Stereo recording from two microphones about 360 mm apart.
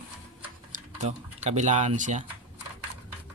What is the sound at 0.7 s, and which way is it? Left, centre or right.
Speech, centre.